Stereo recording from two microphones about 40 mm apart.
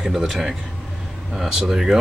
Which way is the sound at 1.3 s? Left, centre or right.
Centre.